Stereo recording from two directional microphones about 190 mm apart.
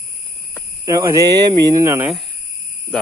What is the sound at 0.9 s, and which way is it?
Speech, 15° right (ahead or behind).